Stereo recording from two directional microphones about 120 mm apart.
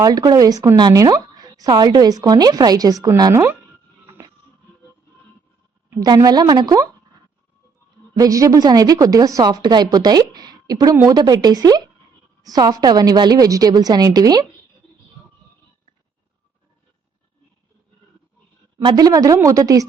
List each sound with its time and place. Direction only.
0.0 s a woman's voice: 30° right (ahead or behind)
6.0 s a woman's voice: 30° right (ahead or behind)
8.2 s a woman's voice: 30° right (ahead or behind)
18.8 s a woman's voice: 35° right (ahead or behind)